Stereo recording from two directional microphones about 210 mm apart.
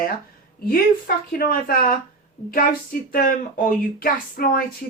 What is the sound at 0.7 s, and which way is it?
Speech, 45° left (ahead or behind).